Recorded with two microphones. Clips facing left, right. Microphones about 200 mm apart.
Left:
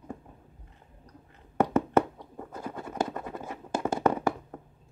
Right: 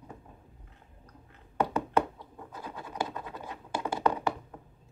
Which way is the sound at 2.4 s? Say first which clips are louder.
Left 5 dB; 45° left (ahead or behind).